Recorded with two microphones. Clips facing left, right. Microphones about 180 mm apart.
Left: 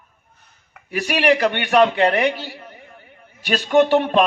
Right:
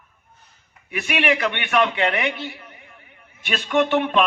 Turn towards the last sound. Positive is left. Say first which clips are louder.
# left 4 dB
turn(degrees=35)  # may be behind; listen again after turning